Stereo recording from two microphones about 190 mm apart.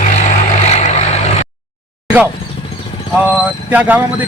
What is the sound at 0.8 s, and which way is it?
Vehicle, 35° left (ahead or behind).